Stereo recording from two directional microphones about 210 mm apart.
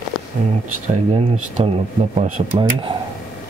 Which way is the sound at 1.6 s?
25° right (ahead or behind).